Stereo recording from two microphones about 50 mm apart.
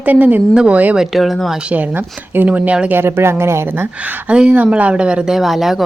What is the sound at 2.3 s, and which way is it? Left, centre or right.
Speech, right.